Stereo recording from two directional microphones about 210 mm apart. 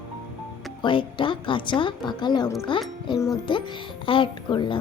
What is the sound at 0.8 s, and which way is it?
Speech, 25° left (ahead or behind).